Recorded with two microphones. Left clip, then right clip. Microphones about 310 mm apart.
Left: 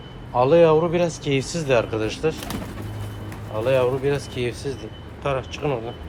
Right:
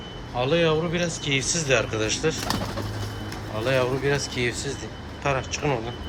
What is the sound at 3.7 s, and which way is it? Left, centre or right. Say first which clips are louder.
Speech: left 3 dB; centre.